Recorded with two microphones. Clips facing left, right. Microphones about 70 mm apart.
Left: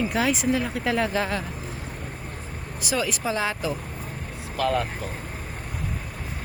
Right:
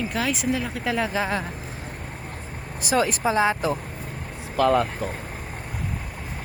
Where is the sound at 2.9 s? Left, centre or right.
Right.